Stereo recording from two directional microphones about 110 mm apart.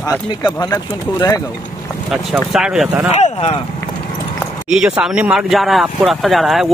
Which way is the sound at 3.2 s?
70° left (ahead or behind).